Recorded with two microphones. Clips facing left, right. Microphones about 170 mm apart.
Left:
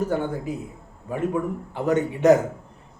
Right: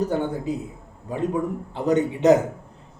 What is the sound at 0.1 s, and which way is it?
Speech, 20° right (ahead or behind).